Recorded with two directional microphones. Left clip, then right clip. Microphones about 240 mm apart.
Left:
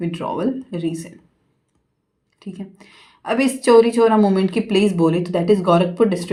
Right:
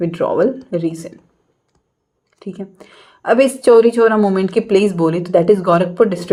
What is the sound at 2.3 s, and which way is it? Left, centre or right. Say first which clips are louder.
A woman's voice: right 6 dB; right.